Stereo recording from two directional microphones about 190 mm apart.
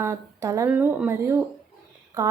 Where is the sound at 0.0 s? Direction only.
15° right (ahead or behind).